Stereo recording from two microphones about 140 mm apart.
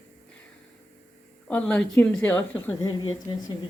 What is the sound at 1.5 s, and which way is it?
A woman's voice, 10° left (ahead or behind).